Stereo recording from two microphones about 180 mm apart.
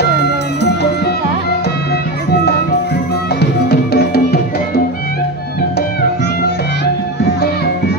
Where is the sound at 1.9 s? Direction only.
65° left (ahead or behind).